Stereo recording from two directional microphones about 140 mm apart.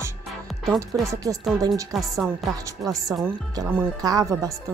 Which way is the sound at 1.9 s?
Centre (ahead or behind).